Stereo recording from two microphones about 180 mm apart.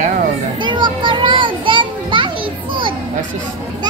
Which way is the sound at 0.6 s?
25° right (ahead or behind).